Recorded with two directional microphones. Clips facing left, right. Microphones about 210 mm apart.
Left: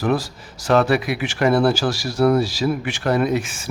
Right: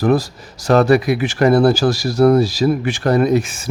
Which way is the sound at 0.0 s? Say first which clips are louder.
Right 5 dB; 40° right (ahead or behind).